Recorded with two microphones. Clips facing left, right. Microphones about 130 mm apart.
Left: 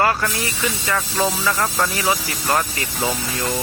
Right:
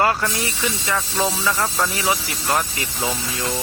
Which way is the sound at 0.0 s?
15° right (ahead or behind).